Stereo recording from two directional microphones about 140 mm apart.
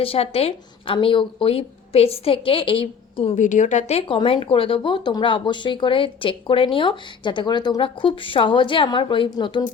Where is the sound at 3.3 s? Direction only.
65° left (ahead or behind).